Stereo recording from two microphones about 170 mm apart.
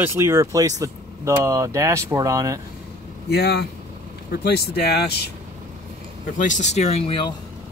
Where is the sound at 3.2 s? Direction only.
70° left (ahead or behind).